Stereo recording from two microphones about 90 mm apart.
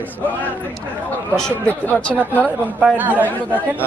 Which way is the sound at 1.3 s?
25° left (ahead or behind).